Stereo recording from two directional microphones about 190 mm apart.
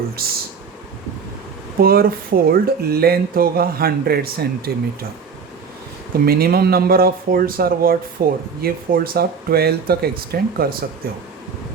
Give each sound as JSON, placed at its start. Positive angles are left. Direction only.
{"t": 0.2, "sound": "speech", "side_deg": -50}
{"t": 1.8, "sound": "speech", "side_deg": -50}
{"t": 6.2, "sound": "speech", "side_deg": -55}